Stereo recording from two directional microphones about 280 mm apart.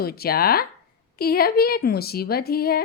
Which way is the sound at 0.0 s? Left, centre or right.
Left.